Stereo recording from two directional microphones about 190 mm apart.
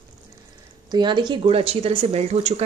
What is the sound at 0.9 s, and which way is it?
Speech, 25° right (ahead or behind).